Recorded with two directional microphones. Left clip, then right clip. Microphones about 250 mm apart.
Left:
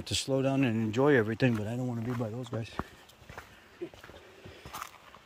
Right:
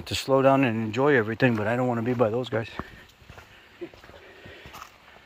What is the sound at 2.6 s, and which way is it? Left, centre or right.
Speech, centre.